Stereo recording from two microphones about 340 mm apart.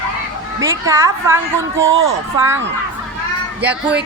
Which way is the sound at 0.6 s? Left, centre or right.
Centre.